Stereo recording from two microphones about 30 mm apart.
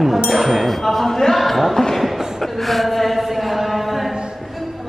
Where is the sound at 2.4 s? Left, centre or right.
Centre.